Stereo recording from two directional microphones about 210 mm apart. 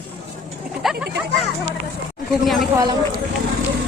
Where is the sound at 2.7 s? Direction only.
20° right (ahead or behind).